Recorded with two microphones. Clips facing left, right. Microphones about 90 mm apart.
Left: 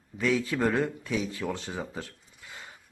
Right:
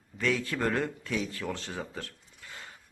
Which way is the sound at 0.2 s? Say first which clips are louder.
Left 3 dB; 5° left (ahead or behind).